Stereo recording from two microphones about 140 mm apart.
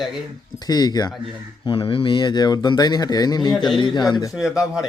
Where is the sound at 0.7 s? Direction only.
30° left (ahead or behind).